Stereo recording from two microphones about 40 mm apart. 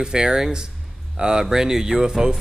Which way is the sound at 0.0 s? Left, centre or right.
Centre.